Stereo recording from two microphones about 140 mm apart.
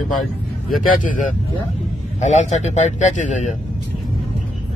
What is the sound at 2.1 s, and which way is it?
A man's voice, 55° left (ahead or behind).